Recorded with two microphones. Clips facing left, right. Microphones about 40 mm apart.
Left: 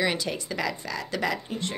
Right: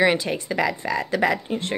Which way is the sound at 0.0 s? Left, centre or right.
Right.